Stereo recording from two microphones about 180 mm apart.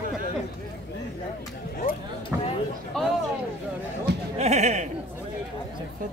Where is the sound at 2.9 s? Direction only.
5° left (ahead or behind).